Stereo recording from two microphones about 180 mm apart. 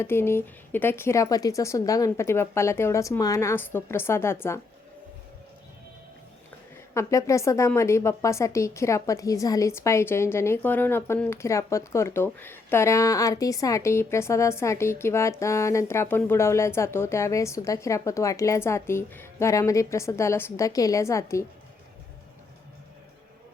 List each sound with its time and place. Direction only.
0.0 s a woman's voice: 15° left (ahead or behind)
6.9 s a woman's voice: 15° left (ahead or behind)